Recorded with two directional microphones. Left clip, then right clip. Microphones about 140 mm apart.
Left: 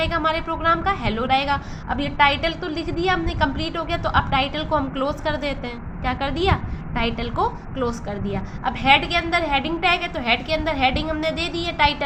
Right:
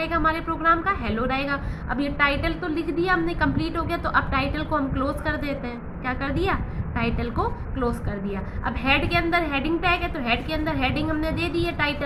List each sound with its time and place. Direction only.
0.0 s a woman's voice: 35° left (ahead or behind)